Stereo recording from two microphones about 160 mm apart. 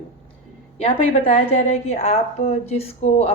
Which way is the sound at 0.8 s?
40° left (ahead or behind).